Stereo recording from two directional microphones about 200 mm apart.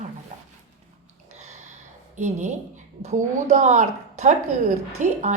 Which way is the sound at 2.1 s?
35° right (ahead or behind).